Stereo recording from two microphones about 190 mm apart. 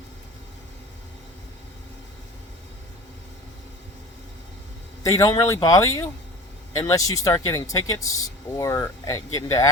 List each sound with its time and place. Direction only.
5.0 s speech: 20° left (ahead or behind)